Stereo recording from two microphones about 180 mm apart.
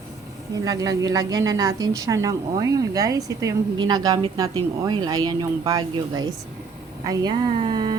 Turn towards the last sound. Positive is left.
turn(degrees=-25)  # may be behind; listen again after turning